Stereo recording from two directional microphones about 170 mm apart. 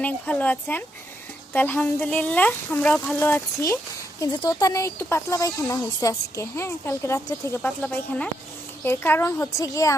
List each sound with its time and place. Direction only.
0.0 s speech: 10° left (ahead or behind)